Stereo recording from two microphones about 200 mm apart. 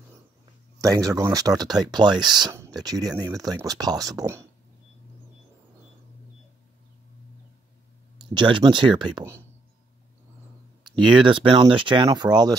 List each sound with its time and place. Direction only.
0.7 s speech: 15° right (ahead or behind)
8.2 s speech: 25° right (ahead or behind)
10.9 s speech: 25° right (ahead or behind)